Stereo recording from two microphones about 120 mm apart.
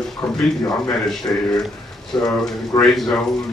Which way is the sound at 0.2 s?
5° left (ahead or behind).